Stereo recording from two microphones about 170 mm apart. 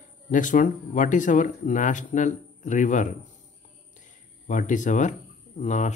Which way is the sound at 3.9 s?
50° left (ahead or behind).